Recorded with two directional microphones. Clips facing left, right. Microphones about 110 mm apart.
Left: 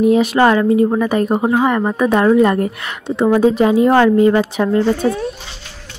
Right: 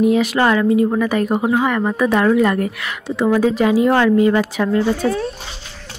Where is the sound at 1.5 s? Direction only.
20° left (ahead or behind).